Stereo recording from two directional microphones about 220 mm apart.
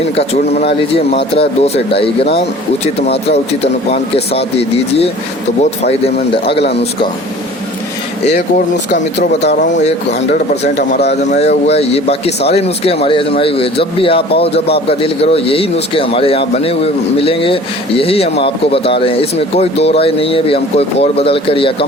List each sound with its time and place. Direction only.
0.2 s a man's voice: 25° left (ahead or behind)
8.3 s speech: 30° left (ahead or behind)
10.8 s a man's voice: 30° left (ahead or behind)